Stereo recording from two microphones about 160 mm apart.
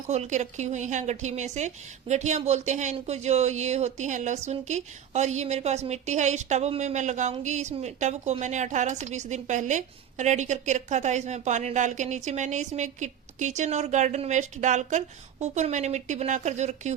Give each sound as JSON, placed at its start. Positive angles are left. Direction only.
{"t": 0.1, "sound": "a woman's voice", "side_deg": -45}